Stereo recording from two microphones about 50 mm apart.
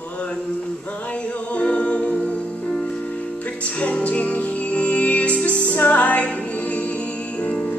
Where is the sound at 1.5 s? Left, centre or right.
Left.